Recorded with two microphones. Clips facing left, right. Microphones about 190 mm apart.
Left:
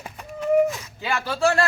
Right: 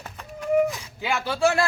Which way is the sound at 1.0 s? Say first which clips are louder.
Even; 15° right (ahead or behind).